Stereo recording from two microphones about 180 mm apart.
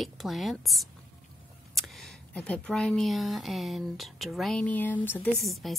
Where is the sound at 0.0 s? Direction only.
Centre (ahead or behind).